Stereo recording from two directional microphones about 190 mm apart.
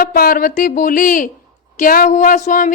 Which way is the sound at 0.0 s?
50° left (ahead or behind).